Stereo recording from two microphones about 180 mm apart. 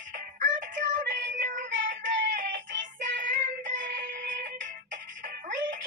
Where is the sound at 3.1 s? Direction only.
45° right (ahead or behind).